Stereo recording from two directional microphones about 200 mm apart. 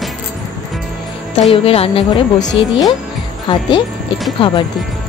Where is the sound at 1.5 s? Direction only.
30° left (ahead or behind).